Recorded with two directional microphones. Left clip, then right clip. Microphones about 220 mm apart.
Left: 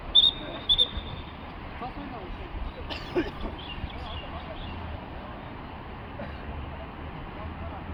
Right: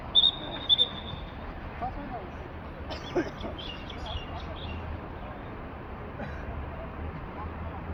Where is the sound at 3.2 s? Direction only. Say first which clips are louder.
Left 1 dB; 40° left (ahead or behind).